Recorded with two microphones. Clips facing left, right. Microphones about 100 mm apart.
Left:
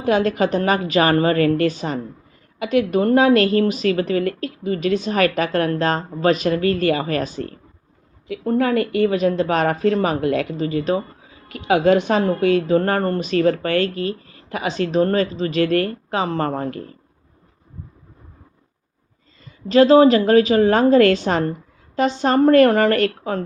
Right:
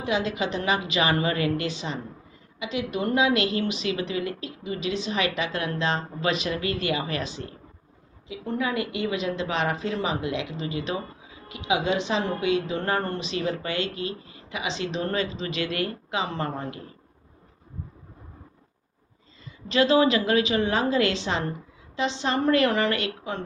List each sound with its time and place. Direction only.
0.0 s a woman's voice: 50° left (ahead or behind)
19.6 s a woman's voice: 40° left (ahead or behind)